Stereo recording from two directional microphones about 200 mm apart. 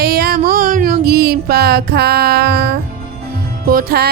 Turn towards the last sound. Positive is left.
turn(degrees=-50)  # may be behind; listen again after turning